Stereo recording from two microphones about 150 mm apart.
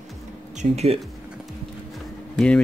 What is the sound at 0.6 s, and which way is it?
Speech, 45° right (ahead or behind).